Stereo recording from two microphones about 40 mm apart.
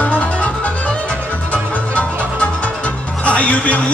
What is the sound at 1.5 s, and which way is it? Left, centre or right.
Music, left.